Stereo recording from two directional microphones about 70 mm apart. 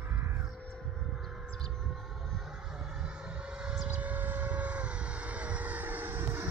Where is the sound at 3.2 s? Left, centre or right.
Centre.